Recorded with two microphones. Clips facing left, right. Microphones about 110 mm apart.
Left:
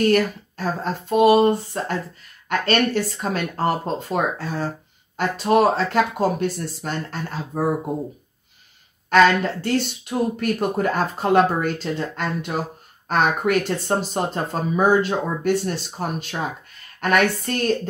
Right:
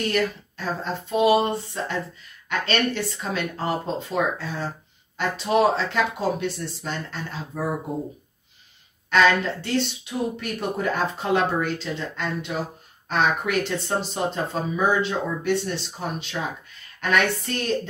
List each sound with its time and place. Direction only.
0.0 s speech: 50° left (ahead or behind)
9.1 s speech: 45° left (ahead or behind)